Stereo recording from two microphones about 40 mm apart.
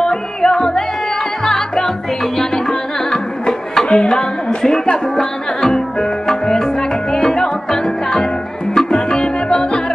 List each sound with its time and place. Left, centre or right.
0.0 s music: centre